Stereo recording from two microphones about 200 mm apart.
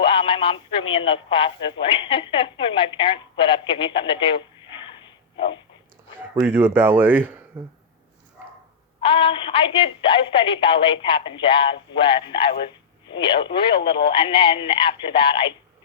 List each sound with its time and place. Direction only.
0.0 s radio: 25° left (ahead or behind)
0.9 s a woman's voice: 25° left (ahead or behind)
4.8 s a sound: 25° left (ahead or behind)
6.4 s speech: 10° right (ahead or behind)
9.0 s a woman's voice: 25° left (ahead or behind)